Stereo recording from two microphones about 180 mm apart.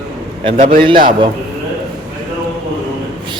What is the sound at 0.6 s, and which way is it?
Speech, 55° right (ahead or behind).